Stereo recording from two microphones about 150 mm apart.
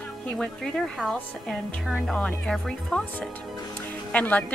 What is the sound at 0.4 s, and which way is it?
A woman's voice, 5° left (ahead or behind).